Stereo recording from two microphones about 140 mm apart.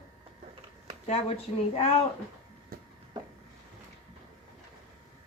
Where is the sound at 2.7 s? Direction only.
90° right.